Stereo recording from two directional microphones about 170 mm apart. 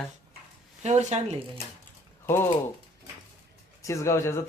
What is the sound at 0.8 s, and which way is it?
Speech, 40° right (ahead or behind).